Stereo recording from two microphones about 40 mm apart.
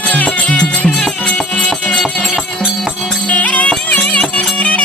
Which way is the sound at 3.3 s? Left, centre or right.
Left.